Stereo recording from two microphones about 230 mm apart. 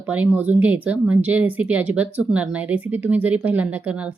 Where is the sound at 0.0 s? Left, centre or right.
Centre.